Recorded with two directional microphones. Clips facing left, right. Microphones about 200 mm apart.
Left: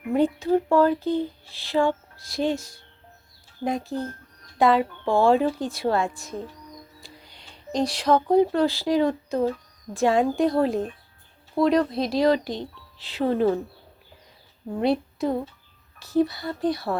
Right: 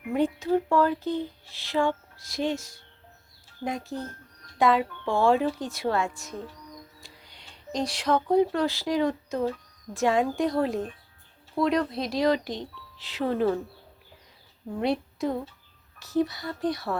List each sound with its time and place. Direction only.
0.1 s speech: 35° left (ahead or behind)
7.7 s speech: 35° left (ahead or behind)
14.8 s a woman's voice: 35° left (ahead or behind)